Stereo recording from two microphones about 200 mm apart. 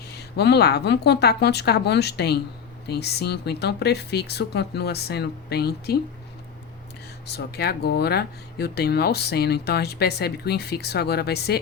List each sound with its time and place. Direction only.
0.0 s speech: 55° left (ahead or behind)
7.3 s speech: 55° left (ahead or behind)